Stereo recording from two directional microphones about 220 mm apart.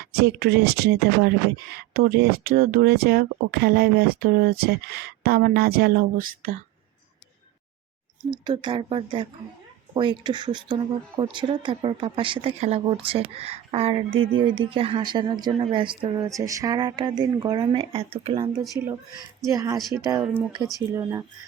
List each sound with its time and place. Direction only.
0.0 s speech: 45° right (ahead or behind)
8.4 s a woman's voice: 20° right (ahead or behind)
14.1 s speech: 65° right (ahead or behind)
14.3 s a woman's voice: 20° right (ahead or behind)
18.6 s speech: 5° right (ahead or behind)
19.5 s speech: 15° right (ahead or behind)
20.9 s speech: 15° right (ahead or behind)